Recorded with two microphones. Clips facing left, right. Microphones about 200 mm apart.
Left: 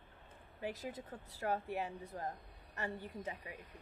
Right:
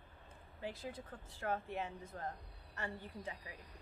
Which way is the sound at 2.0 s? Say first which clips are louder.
Left 2 dB; 15° left (ahead or behind).